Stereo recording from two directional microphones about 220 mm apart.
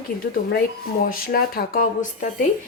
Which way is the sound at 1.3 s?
45° left (ahead or behind).